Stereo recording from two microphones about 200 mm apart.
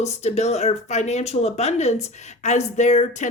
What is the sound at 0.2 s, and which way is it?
A woman's voice, 35° left (ahead or behind).